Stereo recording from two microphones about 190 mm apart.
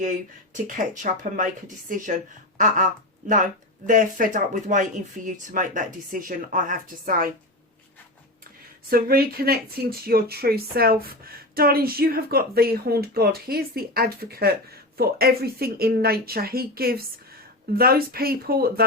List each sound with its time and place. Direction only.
0.0 s speech: 40° right (ahead or behind)
8.9 s speech: 50° right (ahead or behind)